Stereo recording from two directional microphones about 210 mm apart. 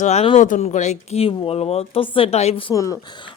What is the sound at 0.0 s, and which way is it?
Speech, 30° left (ahead or behind).